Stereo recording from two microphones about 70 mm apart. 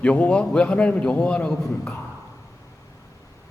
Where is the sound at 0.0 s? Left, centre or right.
Centre.